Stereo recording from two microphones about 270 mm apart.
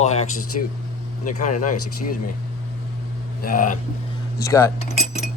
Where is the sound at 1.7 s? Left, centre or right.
Left.